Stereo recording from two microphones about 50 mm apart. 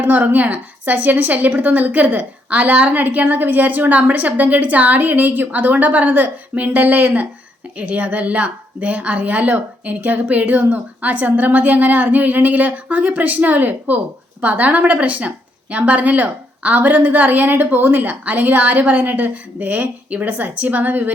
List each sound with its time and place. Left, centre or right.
0.0 s a woman's voice: right